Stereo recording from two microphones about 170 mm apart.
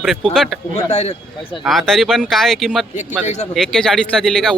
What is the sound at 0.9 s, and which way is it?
Speech, 40° left (ahead or behind).